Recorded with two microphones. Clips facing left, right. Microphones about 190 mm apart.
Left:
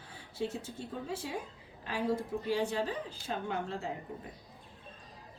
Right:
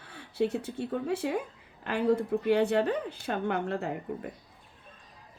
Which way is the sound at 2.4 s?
65° right (ahead or behind).